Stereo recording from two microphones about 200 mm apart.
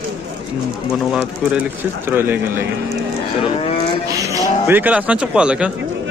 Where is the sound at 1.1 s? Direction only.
10° right (ahead or behind).